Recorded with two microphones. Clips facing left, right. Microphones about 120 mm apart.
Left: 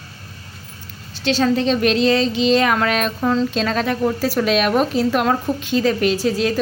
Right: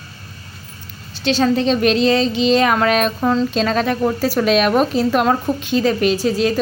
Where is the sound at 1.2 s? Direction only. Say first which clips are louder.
Right 1 dB; 20° right (ahead or behind).